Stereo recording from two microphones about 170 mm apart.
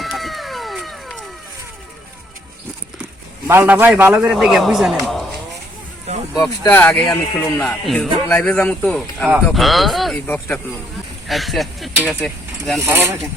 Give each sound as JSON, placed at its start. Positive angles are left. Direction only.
{"t": 0.0, "sound": "a sound", "side_deg": 0}
{"t": 3.4, "sound": "a man's voice", "side_deg": -15}
{"t": 6.7, "sound": "a man's voice", "side_deg": 10}
{"t": 10.2, "sound": "a man's voice", "side_deg": 10}
{"t": 11.3, "sound": "speech", "side_deg": 0}
{"t": 12.8, "sound": "speech", "side_deg": -10}